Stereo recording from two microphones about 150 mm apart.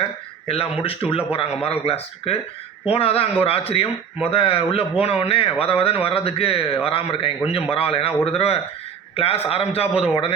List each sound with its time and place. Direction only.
0.4 s a man's voice: 40° left (ahead or behind)